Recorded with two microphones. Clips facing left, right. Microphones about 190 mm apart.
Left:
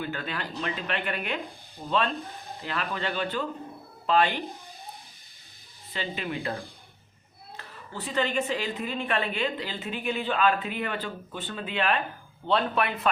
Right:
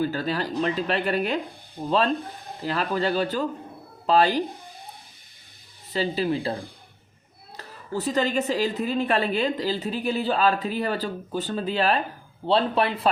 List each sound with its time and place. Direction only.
0.0 s a woman's voice: 35° right (ahead or behind)
1.8 s a woman's voice: 45° right (ahead or behind)
5.9 s a woman's voice: 35° right (ahead or behind)